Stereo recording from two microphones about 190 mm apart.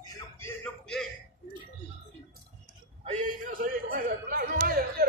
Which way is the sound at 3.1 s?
45° right (ahead or behind).